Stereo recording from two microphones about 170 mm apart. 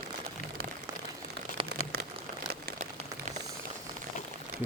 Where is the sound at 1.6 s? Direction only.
70° right (ahead or behind).